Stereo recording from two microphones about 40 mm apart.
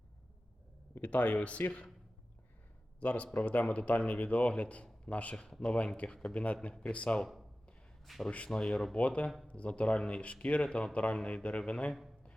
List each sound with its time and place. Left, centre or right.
1.0 s speech: left
3.0 s speech: left
5.5 s speech: centre
6.2 s speech: left
8.0 s speech: centre
8.5 s speech: left